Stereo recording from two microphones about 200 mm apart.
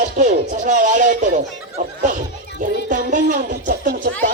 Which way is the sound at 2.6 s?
40° right (ahead or behind).